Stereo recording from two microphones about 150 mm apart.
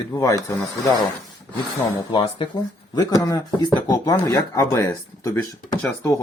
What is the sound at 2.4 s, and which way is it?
Speech, 35° left (ahead or behind).